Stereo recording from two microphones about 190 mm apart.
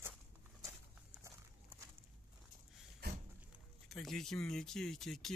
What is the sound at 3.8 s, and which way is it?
Speech, centre (ahead or behind).